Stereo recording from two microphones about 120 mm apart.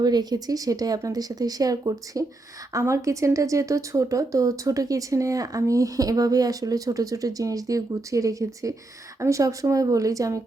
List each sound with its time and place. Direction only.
0.0 s speech: 35° right (ahead or behind)